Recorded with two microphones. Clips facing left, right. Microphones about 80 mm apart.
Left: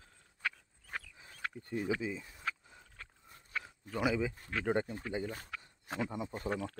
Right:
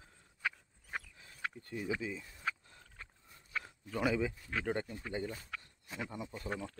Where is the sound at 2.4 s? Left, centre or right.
Centre.